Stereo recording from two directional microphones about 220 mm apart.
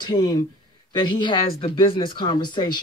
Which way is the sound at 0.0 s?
20° left (ahead or behind).